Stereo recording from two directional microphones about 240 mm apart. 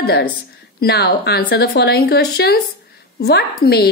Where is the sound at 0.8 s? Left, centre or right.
Left.